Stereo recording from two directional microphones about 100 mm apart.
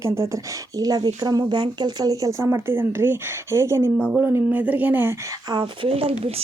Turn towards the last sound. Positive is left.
turn(degrees=-85)